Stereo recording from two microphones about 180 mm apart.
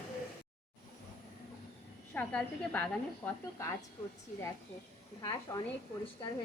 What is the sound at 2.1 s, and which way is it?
Speech, 10° left (ahead or behind).